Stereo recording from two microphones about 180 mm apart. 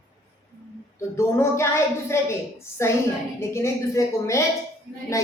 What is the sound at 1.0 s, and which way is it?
A woman's voice, 15° left (ahead or behind).